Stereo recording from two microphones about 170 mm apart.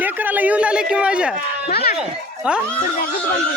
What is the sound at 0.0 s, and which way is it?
A man's voice, 10° right (ahead or behind).